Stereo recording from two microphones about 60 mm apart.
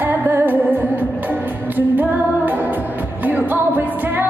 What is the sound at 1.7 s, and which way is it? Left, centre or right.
Music, right.